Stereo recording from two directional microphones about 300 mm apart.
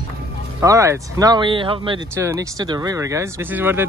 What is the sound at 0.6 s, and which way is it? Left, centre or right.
Speech, centre.